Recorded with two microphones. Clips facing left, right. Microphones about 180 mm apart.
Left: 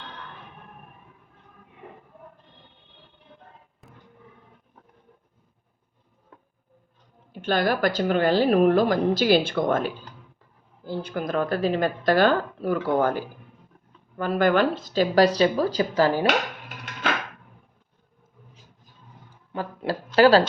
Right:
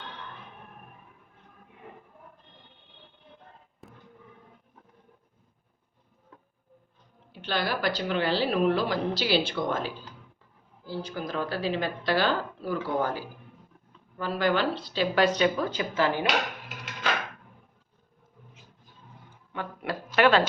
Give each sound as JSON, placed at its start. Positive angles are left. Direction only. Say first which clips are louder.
{"t": 7.3, "sound": "a woman's voice", "louder": "left 7 dB", "side_deg": 45}
{"t": 19.5, "sound": "a sound", "louder": "left 5 dB", "side_deg": 30}
{"t": 20.1, "sound": "speech", "louder": "left 6 dB", "side_deg": 35}